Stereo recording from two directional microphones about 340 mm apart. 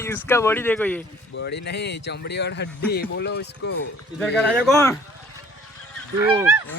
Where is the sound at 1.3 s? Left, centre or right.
Left.